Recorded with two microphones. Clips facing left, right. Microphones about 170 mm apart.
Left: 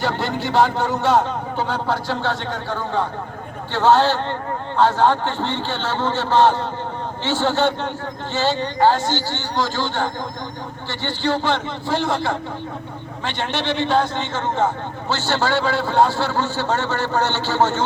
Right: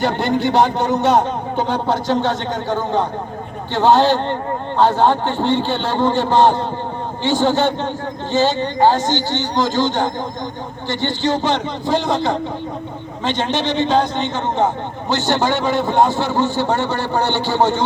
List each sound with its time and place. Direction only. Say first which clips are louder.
0.0 s a man's voice: right 5 dB; 20° right (ahead or behind)